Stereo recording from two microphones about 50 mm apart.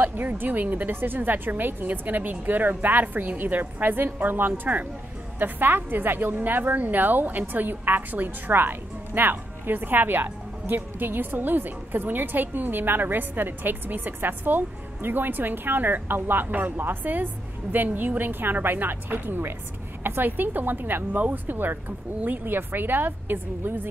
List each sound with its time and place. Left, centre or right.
0.0 s a woman's voice: right